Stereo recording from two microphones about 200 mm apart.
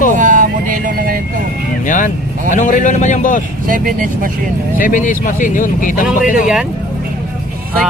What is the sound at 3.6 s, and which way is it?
Speech, 45° right (ahead or behind).